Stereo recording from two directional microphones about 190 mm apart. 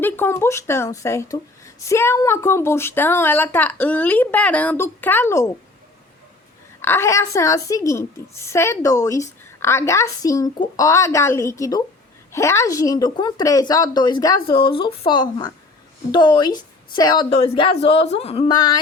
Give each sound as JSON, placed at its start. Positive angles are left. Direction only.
{"t": 0.0, "sound": "a woman's voice", "side_deg": 10}
{"t": 6.8, "sound": "a woman's voice", "side_deg": 15}